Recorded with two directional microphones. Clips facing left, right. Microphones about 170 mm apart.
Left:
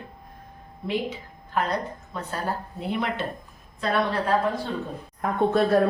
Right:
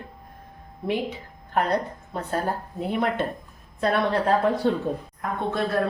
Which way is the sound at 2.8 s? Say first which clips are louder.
Right 3 dB; 50° right (ahead or behind).